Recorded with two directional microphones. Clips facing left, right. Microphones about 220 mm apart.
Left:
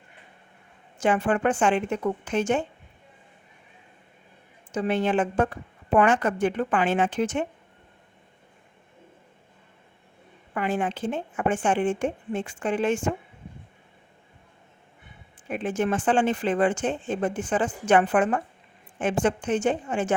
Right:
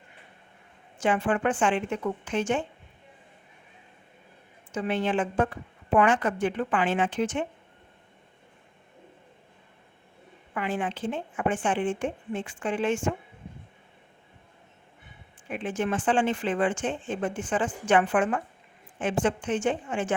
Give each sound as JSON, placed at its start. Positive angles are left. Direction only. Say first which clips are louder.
{"t": 0.9, "sound": "speech", "louder": "left 2 dB", "side_deg": 40}
{"t": 4.7, "sound": "speech", "louder": "left 3 dB", "side_deg": 40}
{"t": 10.5, "sound": "speech", "louder": "left 3 dB", "side_deg": 45}
{"t": 15.4, "sound": "speech", "louder": "left 3 dB", "side_deg": 40}